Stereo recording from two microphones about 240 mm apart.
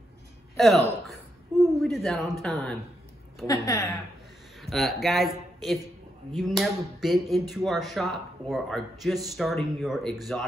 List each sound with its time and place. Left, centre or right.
1.6 s a sound: centre
2.4 s speech: centre
3.4 s a woman's voice: centre
4.6 s speech: centre